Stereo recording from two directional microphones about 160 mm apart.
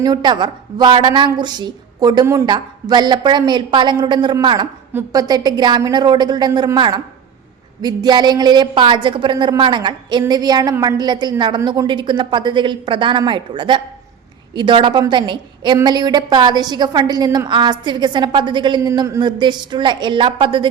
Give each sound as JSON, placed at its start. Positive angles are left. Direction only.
{"t": 0.0, "sound": "a woman's voice", "side_deg": -25}